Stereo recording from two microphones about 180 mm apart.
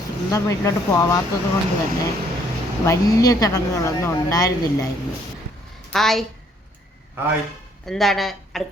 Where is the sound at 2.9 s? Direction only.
20° left (ahead or behind).